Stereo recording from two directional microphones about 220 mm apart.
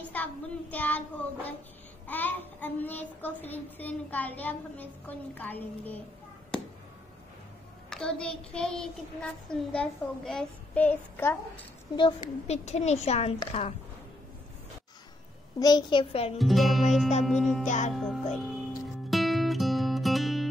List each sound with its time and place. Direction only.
0.1 s child singing: 5° left (ahead or behind)
7.9 s a child's voice: 5° left (ahead or behind)
12.0 s a woman's voice: 25° left (ahead or behind)
15.6 s a woman's voice: 20° left (ahead or behind)
16.3 s a child's voice: centre (ahead or behind)
17.6 s music: 35° left (ahead or behind)
17.9 s music: centre (ahead or behind)